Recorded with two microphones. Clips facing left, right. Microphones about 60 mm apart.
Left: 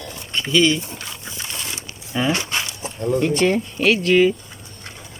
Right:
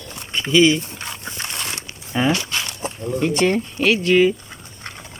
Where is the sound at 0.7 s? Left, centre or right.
Right.